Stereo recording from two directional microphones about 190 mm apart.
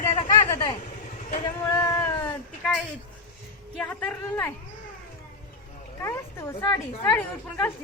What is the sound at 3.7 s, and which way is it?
Speech, 5° left (ahead or behind).